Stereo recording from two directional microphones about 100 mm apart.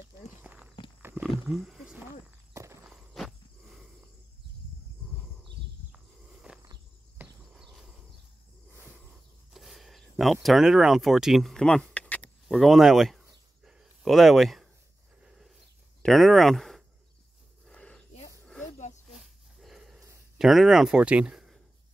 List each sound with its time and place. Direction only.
0.4 s walk: 15° right (ahead or behind)
1.5 s speech: centre (ahead or behind)
2.5 s walk: 30° right (ahead or behind)
2.8 s walk: 5° right (ahead or behind)
6.5 s a sound: 10° right (ahead or behind)
7.5 s a sound: 5° right (ahead or behind)
9.5 s speech: centre (ahead or behind)
12.4 s speech: centre (ahead or behind)
13.7 s a sound: 5° right (ahead or behind)
16.0 s speech: centre (ahead or behind)
17.6 s a sound: 10° left (ahead or behind)
19.1 s dog: centre (ahead or behind)
20.3 s speech: centre (ahead or behind)